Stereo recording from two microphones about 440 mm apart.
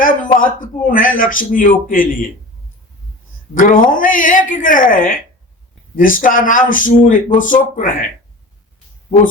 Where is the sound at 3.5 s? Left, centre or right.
Centre.